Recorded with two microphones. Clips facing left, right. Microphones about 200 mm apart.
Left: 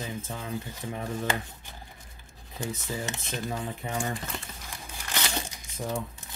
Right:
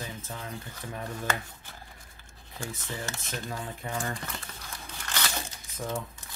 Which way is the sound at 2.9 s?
20° left (ahead or behind).